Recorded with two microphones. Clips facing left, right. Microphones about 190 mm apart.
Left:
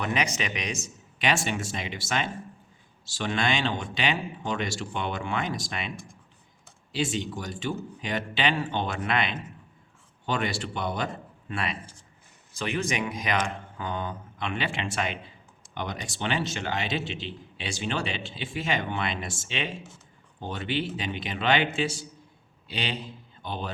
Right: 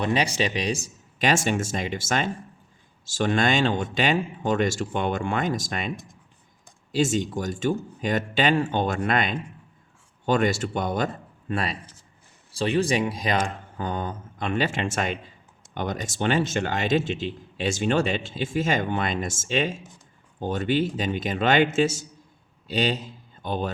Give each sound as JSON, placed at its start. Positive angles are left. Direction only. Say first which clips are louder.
{"t": 0.0, "sound": "a man's voice", "louder": "right 5 dB", "side_deg": -30}
{"t": 6.9, "sound": "a man's voice", "louder": "right 6 dB", "side_deg": -45}